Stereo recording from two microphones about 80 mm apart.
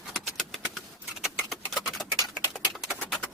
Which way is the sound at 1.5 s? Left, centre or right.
Centre.